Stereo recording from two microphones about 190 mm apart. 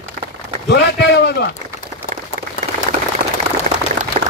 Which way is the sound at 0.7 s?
60° left (ahead or behind).